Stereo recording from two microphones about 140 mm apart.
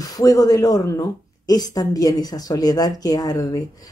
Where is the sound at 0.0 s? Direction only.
25° left (ahead or behind).